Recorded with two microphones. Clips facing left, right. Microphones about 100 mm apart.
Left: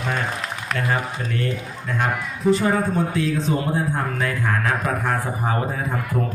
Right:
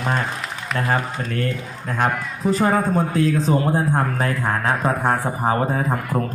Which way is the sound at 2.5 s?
40° right (ahead or behind).